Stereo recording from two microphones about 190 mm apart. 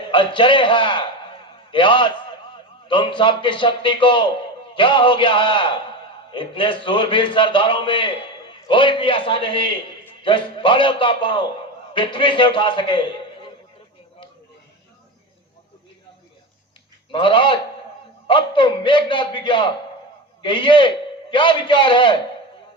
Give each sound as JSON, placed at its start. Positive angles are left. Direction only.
{"t": 0.1, "sound": "a man's voice", "side_deg": 25}
{"t": 17.1, "sound": "a man's voice", "side_deg": 25}